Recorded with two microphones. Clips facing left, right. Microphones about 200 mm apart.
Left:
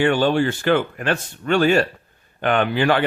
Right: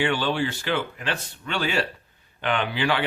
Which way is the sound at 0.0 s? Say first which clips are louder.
Left 7 dB; 45° left (ahead or behind).